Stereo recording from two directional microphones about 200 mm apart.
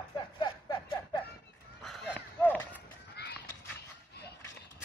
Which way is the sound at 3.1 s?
55° left (ahead or behind).